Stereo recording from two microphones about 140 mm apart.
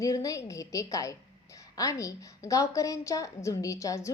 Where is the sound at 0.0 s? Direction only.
25° left (ahead or behind).